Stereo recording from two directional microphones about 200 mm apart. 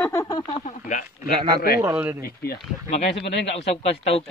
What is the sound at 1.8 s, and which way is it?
Speech, 10° right (ahead or behind).